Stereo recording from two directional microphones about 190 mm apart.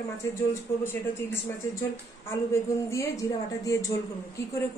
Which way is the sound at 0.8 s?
10° left (ahead or behind).